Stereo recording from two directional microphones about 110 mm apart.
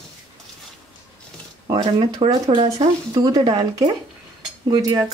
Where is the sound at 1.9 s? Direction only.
65° right (ahead or behind).